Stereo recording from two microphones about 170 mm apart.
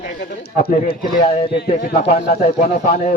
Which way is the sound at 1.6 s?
65° left (ahead or behind).